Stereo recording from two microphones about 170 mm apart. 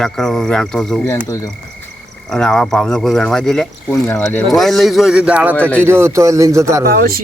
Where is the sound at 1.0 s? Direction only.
15° left (ahead or behind).